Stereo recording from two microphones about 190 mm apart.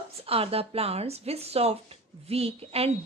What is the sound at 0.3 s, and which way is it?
A woman's voice, 30° right (ahead or behind).